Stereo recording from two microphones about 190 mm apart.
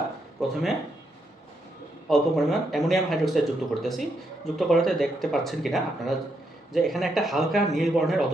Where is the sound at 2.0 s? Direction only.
Centre (ahead or behind).